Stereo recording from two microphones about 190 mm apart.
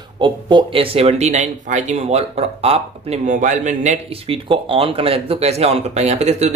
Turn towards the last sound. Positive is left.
turn(degrees=-35)  # may be behind; listen again after turning